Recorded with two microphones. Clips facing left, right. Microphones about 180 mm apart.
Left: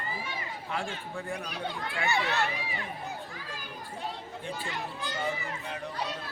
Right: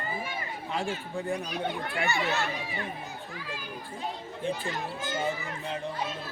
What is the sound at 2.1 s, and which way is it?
Speech, 60° left (ahead or behind).